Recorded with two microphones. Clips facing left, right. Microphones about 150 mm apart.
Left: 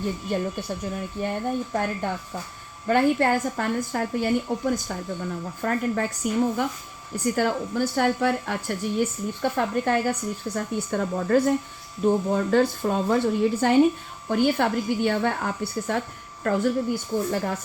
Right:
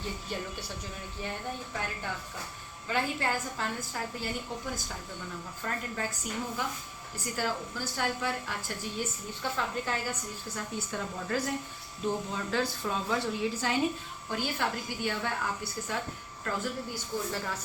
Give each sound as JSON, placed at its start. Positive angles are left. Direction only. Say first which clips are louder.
{"t": 0.0, "sound": "a woman's voice", "louder": "left 10 dB", "side_deg": 50}